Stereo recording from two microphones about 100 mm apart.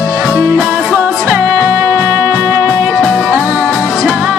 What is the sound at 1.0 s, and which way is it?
Music, 20° right (ahead or behind).